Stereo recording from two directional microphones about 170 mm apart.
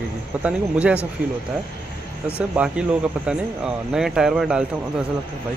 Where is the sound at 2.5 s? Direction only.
5° right (ahead or behind).